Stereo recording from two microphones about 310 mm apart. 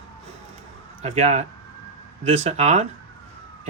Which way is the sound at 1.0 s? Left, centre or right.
Right.